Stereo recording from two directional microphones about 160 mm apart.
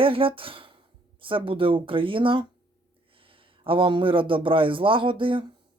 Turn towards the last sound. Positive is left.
turn(degrees=-30)  # may be behind; listen again after turning